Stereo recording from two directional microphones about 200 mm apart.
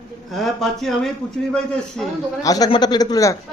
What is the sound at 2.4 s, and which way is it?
Speech, 20° left (ahead or behind).